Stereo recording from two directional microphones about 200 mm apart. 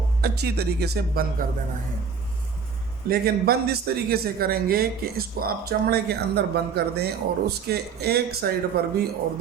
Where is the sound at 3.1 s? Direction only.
50° right (ahead or behind).